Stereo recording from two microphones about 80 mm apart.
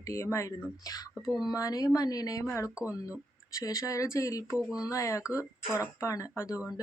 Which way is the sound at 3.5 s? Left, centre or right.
Left.